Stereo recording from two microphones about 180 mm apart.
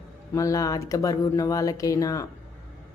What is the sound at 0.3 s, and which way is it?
Speech, 20° left (ahead or behind).